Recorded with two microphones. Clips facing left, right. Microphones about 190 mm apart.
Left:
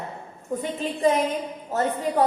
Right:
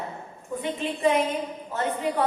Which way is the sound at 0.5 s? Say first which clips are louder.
Left 1 dB; 40° left (ahead or behind).